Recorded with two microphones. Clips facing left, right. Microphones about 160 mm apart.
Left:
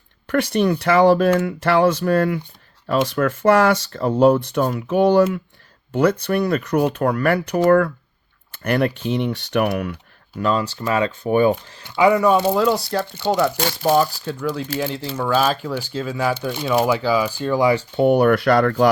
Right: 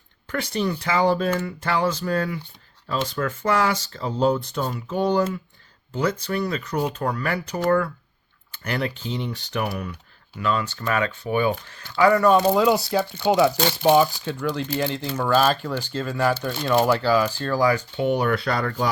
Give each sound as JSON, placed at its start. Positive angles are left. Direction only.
{"t": 0.3, "sound": "speech", "side_deg": 65}
{"t": 2.8, "sound": "speech", "side_deg": 70}
{"t": 10.3, "sound": "speech", "side_deg": 35}
{"t": 11.2, "sound": "speech", "side_deg": 40}
{"t": 11.8, "sound": "speech", "side_deg": 20}
{"t": 12.1, "sound": "speech", "side_deg": 5}
{"t": 17.9, "sound": "speech", "side_deg": 50}